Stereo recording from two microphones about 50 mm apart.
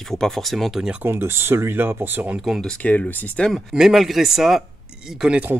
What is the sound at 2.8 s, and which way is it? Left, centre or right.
Speech, left.